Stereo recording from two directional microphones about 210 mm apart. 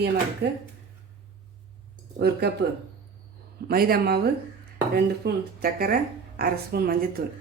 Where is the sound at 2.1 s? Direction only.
50° right (ahead or behind).